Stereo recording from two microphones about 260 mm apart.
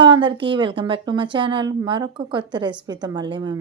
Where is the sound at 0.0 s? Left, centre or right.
Centre.